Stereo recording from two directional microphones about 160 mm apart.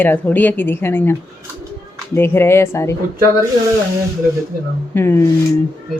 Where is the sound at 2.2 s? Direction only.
15° left (ahead or behind).